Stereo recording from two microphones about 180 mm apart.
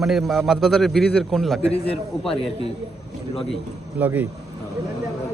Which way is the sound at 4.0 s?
10° right (ahead or behind).